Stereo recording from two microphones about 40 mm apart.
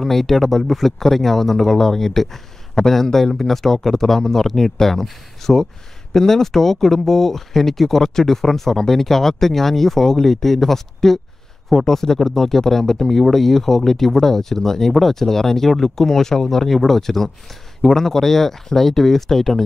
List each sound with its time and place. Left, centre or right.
0.0 s speech: centre